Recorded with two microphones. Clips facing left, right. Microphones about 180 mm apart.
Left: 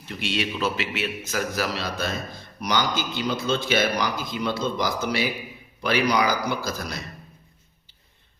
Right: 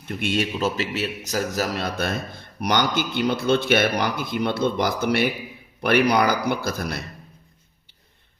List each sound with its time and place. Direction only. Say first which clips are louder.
0.0 s a man's voice: right 4 dB; 50° right (ahead or behind)